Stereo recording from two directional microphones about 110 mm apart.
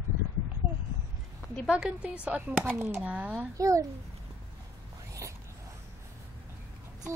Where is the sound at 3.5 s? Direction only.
30° right (ahead or behind).